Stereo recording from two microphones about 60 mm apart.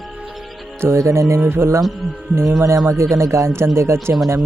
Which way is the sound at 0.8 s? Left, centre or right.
Right.